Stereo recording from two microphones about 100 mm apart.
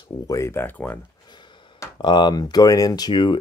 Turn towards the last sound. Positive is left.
turn(degrees=55)  # may be behind; listen again after turning